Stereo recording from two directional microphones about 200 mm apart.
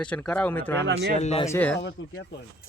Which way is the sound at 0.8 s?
65° right (ahead or behind).